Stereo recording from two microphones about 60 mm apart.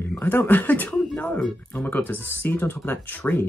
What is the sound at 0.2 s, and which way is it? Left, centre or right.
Speech, left.